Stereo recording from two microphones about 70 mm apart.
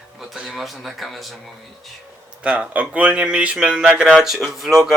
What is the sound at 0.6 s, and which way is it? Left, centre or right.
Speech, centre.